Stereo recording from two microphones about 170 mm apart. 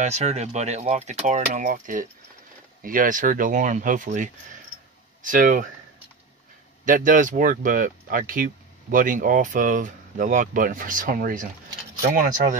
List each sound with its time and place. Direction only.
0.0 s speech: 40° right (ahead or behind)
6.8 s speech: 50° right (ahead or behind)